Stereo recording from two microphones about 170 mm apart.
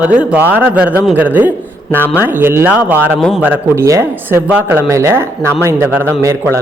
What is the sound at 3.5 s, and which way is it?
Speech, 15° right (ahead or behind).